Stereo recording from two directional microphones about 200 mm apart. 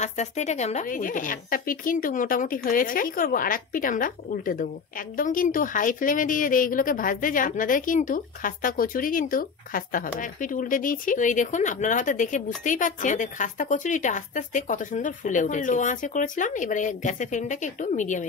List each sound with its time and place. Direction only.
0.0 s speech: 35° left (ahead or behind)